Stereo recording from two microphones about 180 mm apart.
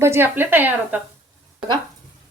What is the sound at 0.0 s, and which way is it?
A woman's voice, 15° right (ahead or behind).